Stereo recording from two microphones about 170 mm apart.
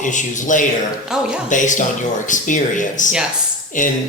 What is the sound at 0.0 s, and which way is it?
Speech, 45° left (ahead or behind).